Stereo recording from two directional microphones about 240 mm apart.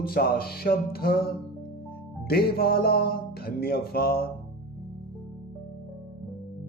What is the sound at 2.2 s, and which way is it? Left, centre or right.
Music, left.